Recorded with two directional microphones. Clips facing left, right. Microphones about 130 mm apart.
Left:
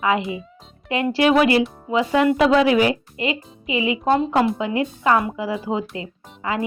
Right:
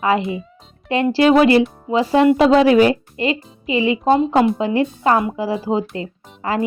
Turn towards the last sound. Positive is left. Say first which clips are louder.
# right 4 dB
turn(degrees=-35)  # may be behind; listen again after turning